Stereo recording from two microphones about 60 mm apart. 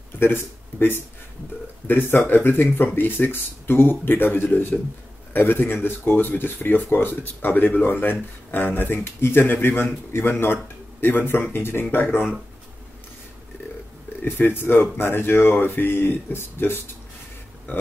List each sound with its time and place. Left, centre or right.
0.2 s speech: left
14.2 s speech: left